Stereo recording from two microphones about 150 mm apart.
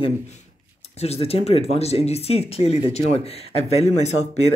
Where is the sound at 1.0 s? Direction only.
40° left (ahead or behind).